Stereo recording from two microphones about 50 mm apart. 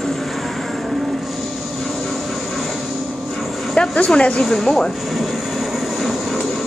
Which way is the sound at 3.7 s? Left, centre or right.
Centre.